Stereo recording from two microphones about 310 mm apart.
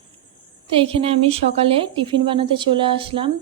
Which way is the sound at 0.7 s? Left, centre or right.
Centre.